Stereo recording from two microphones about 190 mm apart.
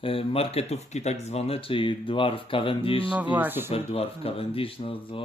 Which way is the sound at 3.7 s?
30° left (ahead or behind).